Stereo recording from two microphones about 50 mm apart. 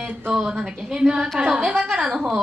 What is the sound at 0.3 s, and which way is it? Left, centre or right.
Female singing, centre.